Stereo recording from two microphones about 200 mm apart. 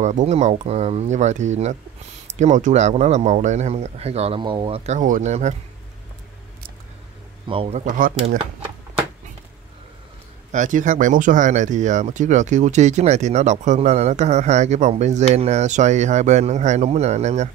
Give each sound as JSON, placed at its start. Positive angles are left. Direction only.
{"t": 0.0, "sound": "speech", "side_deg": -35}
{"t": 7.4, "sound": "speech", "side_deg": -30}
{"t": 10.5, "sound": "speech", "side_deg": -40}